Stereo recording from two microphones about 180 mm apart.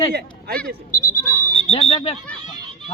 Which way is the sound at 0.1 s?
60° right (ahead or behind).